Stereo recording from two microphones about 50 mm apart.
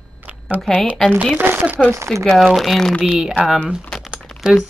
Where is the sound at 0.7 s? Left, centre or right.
Centre.